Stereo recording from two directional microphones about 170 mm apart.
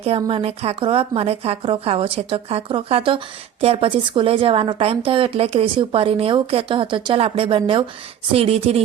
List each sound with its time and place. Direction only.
0.3 s a woman's voice: 35° right (ahead or behind)